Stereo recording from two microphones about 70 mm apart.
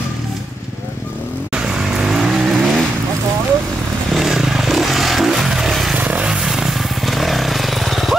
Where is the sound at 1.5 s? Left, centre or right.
Centre.